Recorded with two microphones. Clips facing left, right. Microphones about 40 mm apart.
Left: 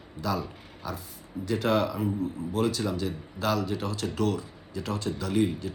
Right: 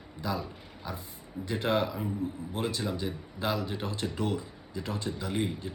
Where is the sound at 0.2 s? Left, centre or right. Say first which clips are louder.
Left 3 dB; right.